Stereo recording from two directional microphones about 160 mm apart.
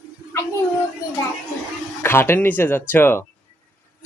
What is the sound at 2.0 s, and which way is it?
Speech, 15° left (ahead or behind).